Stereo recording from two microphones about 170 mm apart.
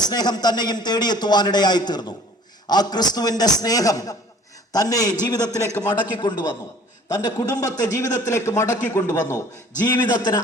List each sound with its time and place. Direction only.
0.0 s a man's voice: 25° left (ahead or behind)